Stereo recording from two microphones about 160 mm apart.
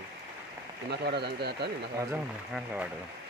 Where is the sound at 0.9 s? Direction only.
90° right.